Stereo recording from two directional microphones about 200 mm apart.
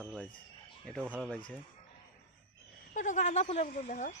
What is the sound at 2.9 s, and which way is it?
Speech, 40° left (ahead or behind).